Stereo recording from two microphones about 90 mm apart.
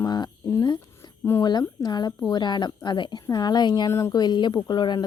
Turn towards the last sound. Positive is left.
turn(degrees=55)  # may be behind; listen again after turning